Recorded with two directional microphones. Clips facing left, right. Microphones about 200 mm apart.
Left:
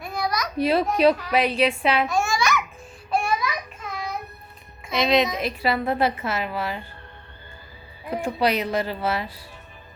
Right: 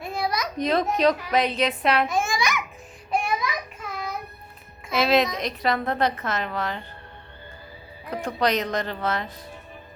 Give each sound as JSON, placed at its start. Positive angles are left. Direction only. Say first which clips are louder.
{"t": 0.0, "sound": "a sound", "louder": "even", "side_deg": -25}
{"t": 0.5, "sound": "a woman's voice", "louder": "left 3 dB", "side_deg": 10}
{"t": 2.0, "sound": "babbling", "louder": "left 2 dB", "side_deg": -20}
{"t": 3.1, "sound": "a sound", "louder": "left 2 dB", "side_deg": -15}
{"t": 4.9, "sound": "a woman's voice", "louder": "even", "side_deg": 0}
{"t": 8.1, "sound": "a woman's voice", "louder": "left 1 dB", "side_deg": 5}